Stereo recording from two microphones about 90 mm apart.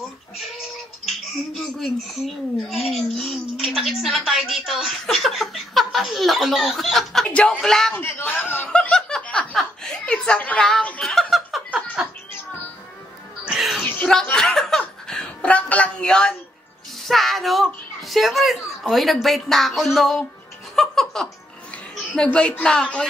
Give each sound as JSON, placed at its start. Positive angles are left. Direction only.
{"t": 1.0, "sound": "a child's voice", "side_deg": 0}
{"t": 7.9, "sound": "a man's voice", "side_deg": 20}
{"t": 8.6, "sound": "snicker", "side_deg": 10}
{"t": 9.6, "sound": "chuckle", "side_deg": 10}
{"t": 10.7, "sound": "snicker", "side_deg": 10}
{"t": 13.5, "sound": "music", "side_deg": -5}
{"t": 13.8, "sound": "a sound", "side_deg": 20}
{"t": 14.3, "sound": "chuckle", "side_deg": 5}
{"t": 17.0, "sound": "a child's voice", "side_deg": 0}
{"t": 20.7, "sound": "music", "side_deg": 5}
{"t": 22.1, "sound": "speech", "side_deg": 10}